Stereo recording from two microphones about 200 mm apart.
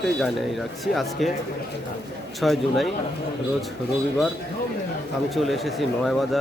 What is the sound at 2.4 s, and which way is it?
Speech, centre (ahead or behind).